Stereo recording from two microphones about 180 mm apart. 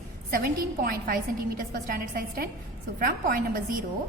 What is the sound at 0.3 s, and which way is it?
A woman's voice, 50° right (ahead or behind).